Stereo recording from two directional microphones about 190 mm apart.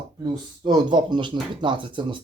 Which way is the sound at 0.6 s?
25° right (ahead or behind).